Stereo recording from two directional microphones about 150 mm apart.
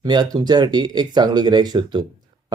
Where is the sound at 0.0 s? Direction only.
30° right (ahead or behind).